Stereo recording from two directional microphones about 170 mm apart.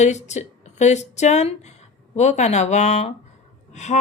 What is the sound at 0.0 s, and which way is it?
A woman's voice, 45° left (ahead or behind).